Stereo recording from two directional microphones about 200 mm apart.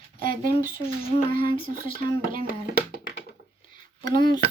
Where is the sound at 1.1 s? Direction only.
25° left (ahead or behind).